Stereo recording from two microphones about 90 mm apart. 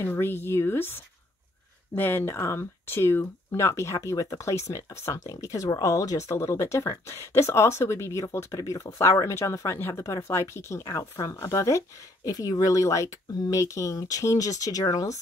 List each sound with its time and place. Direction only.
0.0 s speech: 25° left (ahead or behind)
10.8 s speech: 40° left (ahead or behind)